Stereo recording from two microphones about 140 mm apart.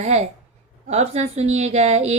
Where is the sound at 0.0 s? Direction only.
50° right (ahead or behind).